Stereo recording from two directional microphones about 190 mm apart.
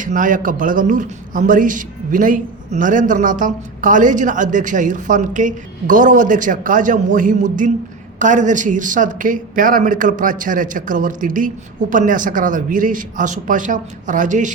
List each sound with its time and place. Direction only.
0.0 s a man's voice: 45° right (ahead or behind)